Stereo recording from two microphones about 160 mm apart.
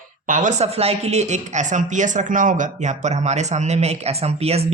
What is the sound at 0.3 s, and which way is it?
Speech, 55° right (ahead or behind).